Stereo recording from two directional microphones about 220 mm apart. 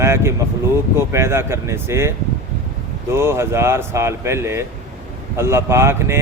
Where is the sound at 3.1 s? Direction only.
10° right (ahead or behind).